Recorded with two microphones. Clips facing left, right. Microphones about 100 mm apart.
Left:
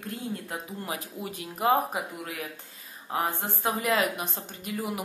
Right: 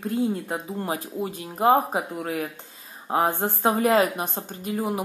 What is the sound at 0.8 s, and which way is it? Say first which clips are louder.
Speech: right 7 dB; 35° right (ahead or behind).